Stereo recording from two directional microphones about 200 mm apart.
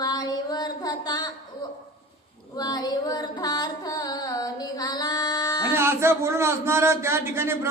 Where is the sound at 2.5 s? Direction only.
20° left (ahead or behind).